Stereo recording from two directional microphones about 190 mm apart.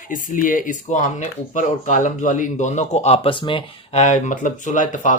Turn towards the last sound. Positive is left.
turn(degrees=40)  # may be behind; listen again after turning